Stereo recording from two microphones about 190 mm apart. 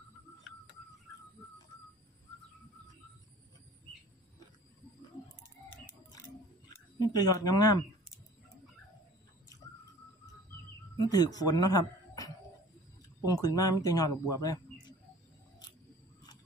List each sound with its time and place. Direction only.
6.7 s speech: 20° left (ahead or behind)
11.0 s speech: 20° left (ahead or behind)